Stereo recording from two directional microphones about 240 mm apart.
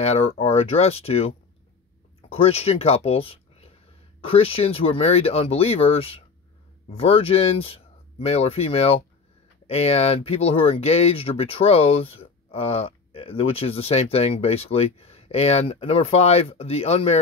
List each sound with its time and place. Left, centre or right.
0.0 s speech: left
2.3 s speech: left